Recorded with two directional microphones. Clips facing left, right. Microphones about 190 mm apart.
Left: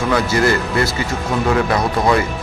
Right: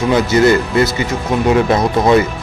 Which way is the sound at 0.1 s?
20° right (ahead or behind).